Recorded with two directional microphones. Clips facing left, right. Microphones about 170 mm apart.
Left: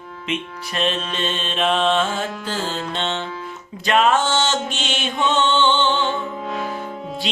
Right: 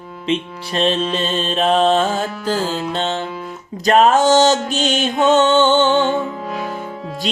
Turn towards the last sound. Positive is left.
turn(degrees=0)  # may be behind; listen again after turning